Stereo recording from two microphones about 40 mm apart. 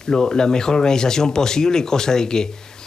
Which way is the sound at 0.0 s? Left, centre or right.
Centre.